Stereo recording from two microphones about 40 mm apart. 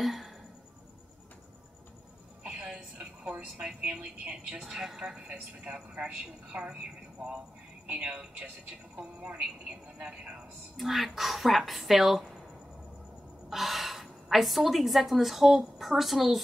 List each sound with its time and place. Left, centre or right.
0.0 s music: centre
2.5 s a sound: right
3.8 s a woman's voice: right
4.6 s a woman's voice: centre; by 6.7 s right
7.8 s a woman's voice: right
10.8 s a woman's voice: centre
13.5 s a woman's voice: centre